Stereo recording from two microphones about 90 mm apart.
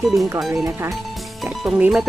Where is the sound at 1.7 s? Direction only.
5° right (ahead or behind).